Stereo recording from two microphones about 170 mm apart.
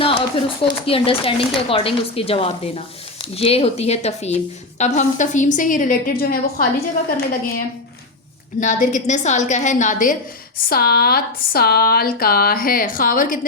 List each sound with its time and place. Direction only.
0.0 s a woman's voice: 30° left (ahead or behind); by 7.6 s 60° left (ahead or behind)
8.6 s a woman's voice: 50° left (ahead or behind)
10.7 s speech: 65° left (ahead or behind)